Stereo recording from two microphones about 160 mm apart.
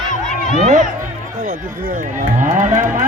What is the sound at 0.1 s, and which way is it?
Crowd, 50° left (ahead or behind).